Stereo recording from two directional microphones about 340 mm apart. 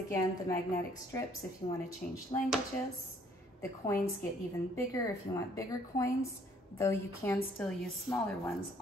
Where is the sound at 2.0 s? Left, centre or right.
Left.